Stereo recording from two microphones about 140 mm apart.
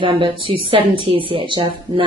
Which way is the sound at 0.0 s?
35° right (ahead or behind).